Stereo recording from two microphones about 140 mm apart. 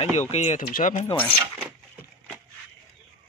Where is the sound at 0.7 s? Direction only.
80° left.